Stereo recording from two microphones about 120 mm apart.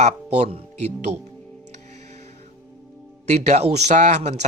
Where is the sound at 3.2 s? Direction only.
65° right (ahead or behind).